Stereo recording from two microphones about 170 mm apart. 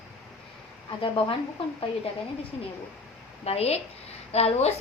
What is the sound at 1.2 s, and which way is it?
Speech, 30° left (ahead or behind).